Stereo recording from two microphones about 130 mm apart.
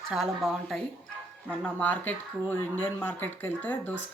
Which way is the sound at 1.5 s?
10° left (ahead or behind).